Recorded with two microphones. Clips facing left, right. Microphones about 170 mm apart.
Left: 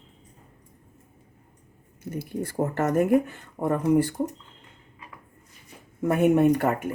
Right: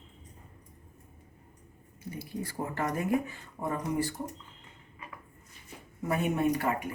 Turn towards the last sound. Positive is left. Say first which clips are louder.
# left 7 dB
turn(degrees=55)  # may be behind; listen again after turning